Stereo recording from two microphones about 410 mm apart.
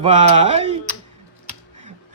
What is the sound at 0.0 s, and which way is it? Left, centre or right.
Speech, centre.